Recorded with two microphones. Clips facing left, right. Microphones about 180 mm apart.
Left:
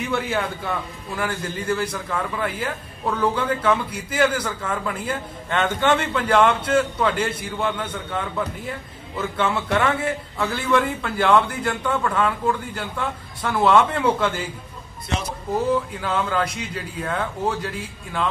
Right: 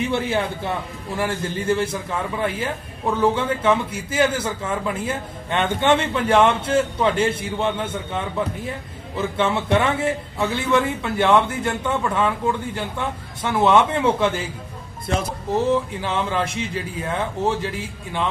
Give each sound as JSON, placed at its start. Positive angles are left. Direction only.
{"t": 0.0, "sound": "a man's voice", "side_deg": -25}
{"t": 15.0, "sound": "speech", "side_deg": -50}
{"t": 15.5, "sound": "a man's voice", "side_deg": -25}